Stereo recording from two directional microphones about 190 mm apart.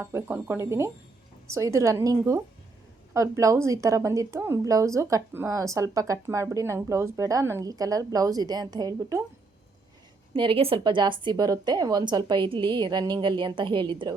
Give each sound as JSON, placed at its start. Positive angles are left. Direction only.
{"t": 0.0, "sound": "speech", "side_deg": -10}
{"t": 10.3, "sound": "a woman's voice", "side_deg": -25}